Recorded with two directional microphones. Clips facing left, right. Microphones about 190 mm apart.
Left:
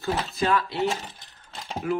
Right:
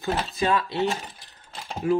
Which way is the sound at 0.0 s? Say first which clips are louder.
Right 1 dB; 20° right (ahead or behind).